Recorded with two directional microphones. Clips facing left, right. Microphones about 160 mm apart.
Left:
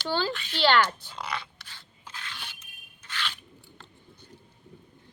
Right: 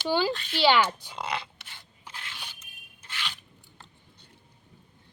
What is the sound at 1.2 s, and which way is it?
Dog, 25° right (ahead or behind).